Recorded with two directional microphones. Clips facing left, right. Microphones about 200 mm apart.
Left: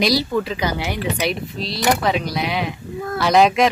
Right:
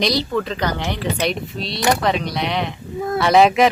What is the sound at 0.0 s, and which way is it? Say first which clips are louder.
Speech: left 1 dB; 5° left (ahead or behind).